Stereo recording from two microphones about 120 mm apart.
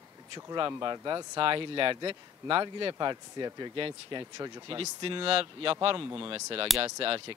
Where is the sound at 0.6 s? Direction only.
35° right (ahead or behind).